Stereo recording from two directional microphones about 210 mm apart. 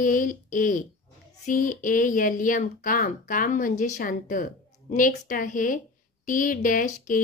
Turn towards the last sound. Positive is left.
turn(degrees=40)  # may be behind; listen again after turning